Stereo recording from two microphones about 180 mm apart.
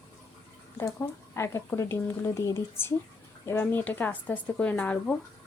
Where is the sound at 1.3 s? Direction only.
15° left (ahead or behind).